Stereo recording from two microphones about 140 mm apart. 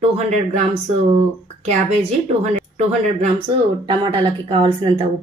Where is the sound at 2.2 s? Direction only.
55° right (ahead or behind).